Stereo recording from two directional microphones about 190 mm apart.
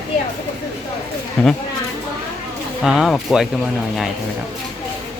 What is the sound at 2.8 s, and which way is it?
Speech, centre (ahead or behind).